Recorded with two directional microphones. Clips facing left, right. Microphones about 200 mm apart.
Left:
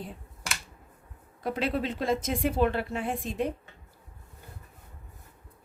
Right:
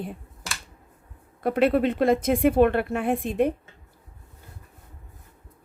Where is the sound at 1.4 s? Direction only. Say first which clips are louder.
Right 9 dB; 60° right (ahead or behind).